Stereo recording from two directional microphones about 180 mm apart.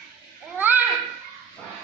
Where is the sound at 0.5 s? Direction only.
10° right (ahead or behind).